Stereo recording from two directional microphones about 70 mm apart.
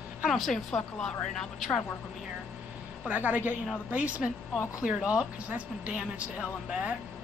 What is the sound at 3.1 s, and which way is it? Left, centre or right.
Speech, right.